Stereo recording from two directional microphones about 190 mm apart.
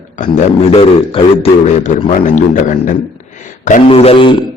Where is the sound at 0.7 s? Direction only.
30° left (ahead or behind).